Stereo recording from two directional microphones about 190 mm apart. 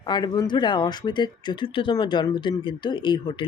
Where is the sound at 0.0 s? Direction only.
20° left (ahead or behind).